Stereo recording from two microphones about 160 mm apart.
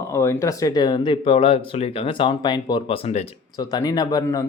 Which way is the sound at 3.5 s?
25° left (ahead or behind).